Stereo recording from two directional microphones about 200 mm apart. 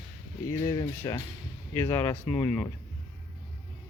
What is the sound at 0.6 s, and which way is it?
A man's voice, 25° left (ahead or behind).